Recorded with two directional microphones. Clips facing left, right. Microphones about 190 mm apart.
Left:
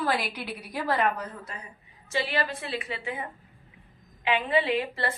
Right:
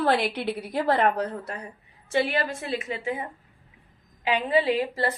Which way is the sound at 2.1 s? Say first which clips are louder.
Right 4 dB; 55° right (ahead or behind).